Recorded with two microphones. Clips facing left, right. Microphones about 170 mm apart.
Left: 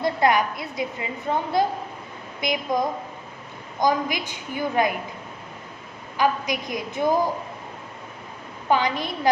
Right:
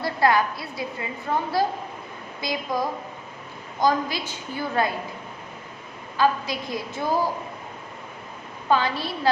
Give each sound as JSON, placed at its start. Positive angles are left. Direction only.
{"t": 0.0, "sound": "a woman's voice", "side_deg": 20}
{"t": 6.1, "sound": "a woman's voice", "side_deg": 15}
{"t": 8.7, "sound": "a woman's voice", "side_deg": 15}